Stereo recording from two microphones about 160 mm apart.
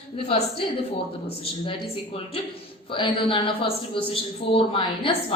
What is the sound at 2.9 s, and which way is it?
A woman's voice, 35° left (ahead or behind).